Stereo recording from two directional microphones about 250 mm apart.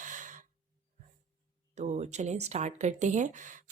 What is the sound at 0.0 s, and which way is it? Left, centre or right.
Breathing, right.